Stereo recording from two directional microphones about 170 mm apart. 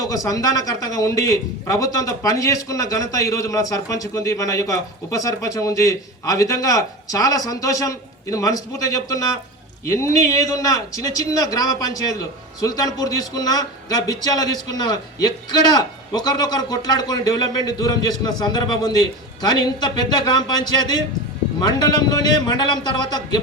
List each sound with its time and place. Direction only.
0.0 s a man's voice: 20° left (ahead or behind)